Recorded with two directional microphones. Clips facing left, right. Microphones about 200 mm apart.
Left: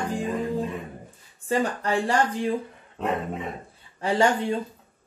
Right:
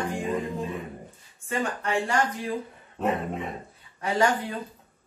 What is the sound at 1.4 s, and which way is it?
Speech, 35° left (ahead or behind).